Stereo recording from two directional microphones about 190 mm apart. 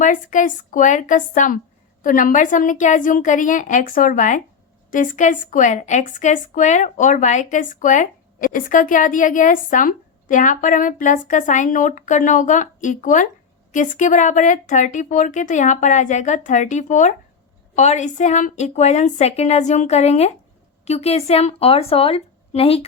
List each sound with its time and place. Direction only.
0.0 s a woman's voice: 40° left (ahead or behind)